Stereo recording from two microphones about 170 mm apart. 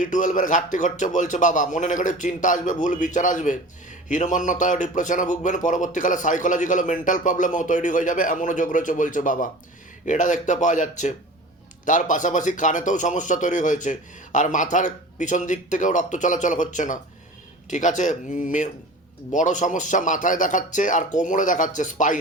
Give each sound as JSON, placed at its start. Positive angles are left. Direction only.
{"t": 0.0, "sound": "a man's voice", "side_deg": 50}